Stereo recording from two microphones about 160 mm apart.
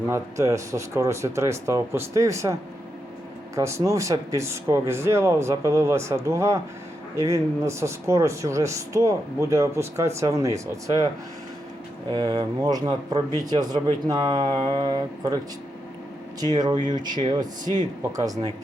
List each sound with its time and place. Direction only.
0.1 s speech: 20° right (ahead or behind)
12.1 s speech: 25° right (ahead or behind)
16.4 s speech: 25° right (ahead or behind)